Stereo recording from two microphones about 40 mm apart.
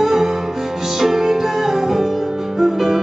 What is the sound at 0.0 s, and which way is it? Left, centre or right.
Music, centre.